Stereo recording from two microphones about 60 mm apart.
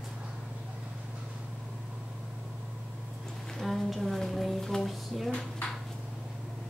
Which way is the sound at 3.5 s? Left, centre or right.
Centre.